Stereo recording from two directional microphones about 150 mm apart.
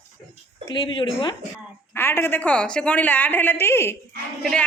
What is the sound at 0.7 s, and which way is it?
Speech, 30° left (ahead or behind).